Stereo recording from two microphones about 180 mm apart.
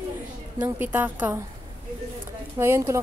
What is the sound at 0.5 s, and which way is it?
Speech, 10° right (ahead or behind).